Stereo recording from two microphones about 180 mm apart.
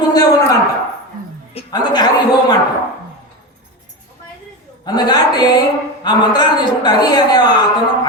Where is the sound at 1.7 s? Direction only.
25° left (ahead or behind).